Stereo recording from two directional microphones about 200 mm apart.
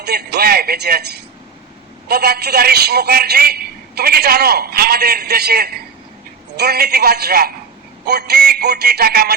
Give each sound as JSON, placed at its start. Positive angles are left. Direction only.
{"t": 0.0, "sound": "a man's voice", "side_deg": -55}